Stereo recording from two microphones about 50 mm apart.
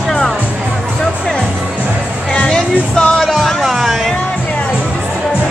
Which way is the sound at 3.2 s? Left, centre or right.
Centre.